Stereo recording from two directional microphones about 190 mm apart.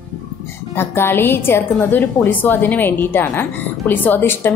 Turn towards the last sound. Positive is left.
turn(degrees=10)  # may be behind; listen again after turning